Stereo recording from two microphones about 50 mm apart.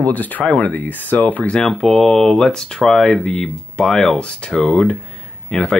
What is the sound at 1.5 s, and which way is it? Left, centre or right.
Speech, centre.